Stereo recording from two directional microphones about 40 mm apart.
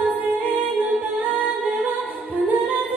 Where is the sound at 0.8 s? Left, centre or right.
Right.